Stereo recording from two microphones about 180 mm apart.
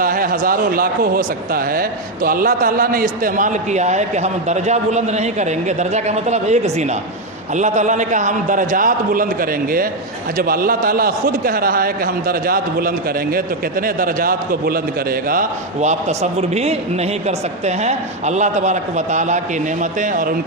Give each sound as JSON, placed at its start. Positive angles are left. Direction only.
{"t": 0.0, "sound": "a man's voice", "side_deg": -50}